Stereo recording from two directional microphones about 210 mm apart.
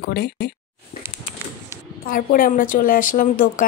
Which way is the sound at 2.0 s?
40° left (ahead or behind).